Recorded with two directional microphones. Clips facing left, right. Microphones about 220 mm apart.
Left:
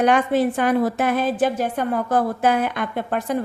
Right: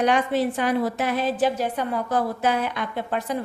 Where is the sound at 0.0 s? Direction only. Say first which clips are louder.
Left 3 dB; 50° left (ahead or behind).